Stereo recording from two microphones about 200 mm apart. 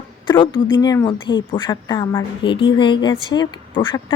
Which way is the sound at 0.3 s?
20° left (ahead or behind).